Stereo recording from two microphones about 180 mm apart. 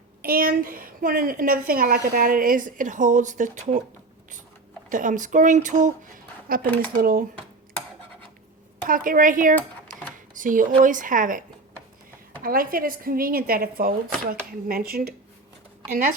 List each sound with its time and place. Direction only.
0.2 s a woman's voice: 55° right (ahead or behind)
4.9 s a woman's voice: 45° right (ahead or behind)
6.5 s a woman's voice: 55° right (ahead or behind)
8.8 s a woman's voice: 50° right (ahead or behind)